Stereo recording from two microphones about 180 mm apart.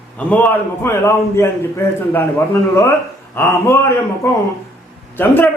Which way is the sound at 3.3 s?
15° left (ahead or behind).